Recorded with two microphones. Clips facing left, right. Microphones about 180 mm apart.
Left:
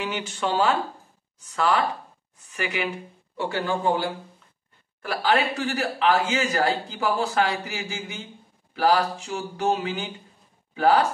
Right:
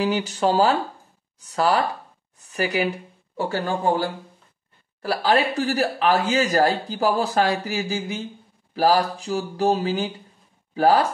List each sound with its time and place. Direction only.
0.0 s speech: 35° right (ahead or behind)